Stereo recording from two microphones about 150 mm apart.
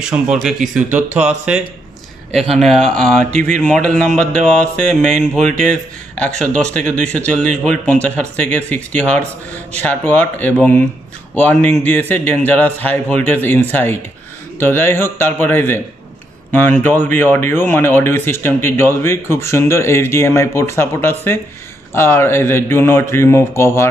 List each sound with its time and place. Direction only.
0.0 s a man's voice: 5° right (ahead or behind)
1.0 s speech: 50° right (ahead or behind)
2.5 s a man's voice: centre (ahead or behind)
16.8 s speech: 15° left (ahead or behind)